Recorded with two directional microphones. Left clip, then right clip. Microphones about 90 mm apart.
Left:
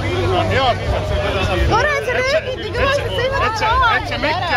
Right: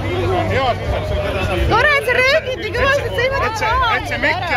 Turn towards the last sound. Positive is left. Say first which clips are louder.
# left 1 dB
turn(degrees=-25)  # may be behind; listen again after turning